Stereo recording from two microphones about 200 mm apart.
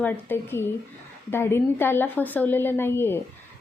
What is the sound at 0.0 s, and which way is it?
A woman's voice, 10° left (ahead or behind).